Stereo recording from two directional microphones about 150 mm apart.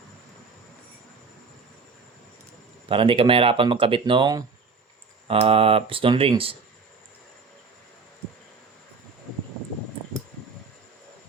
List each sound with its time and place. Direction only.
2.9 s speech: 35° right (ahead or behind)